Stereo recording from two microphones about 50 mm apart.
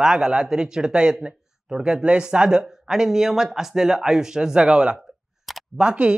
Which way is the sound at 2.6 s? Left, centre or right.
Centre.